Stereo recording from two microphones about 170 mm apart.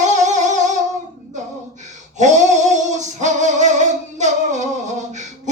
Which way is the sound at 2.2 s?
45° right (ahead or behind).